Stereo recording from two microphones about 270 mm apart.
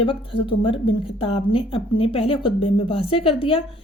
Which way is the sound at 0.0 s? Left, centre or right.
Centre.